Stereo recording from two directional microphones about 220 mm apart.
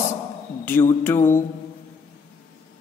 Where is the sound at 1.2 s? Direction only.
35° left (ahead or behind).